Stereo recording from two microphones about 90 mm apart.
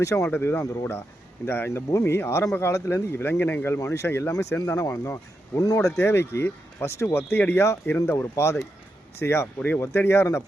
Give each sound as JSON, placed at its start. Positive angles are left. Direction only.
{"t": 0.0, "sound": "speech", "side_deg": 35}
{"t": 0.3, "sound": "speech", "side_deg": 20}
{"t": 6.0, "sound": "speech", "side_deg": 30}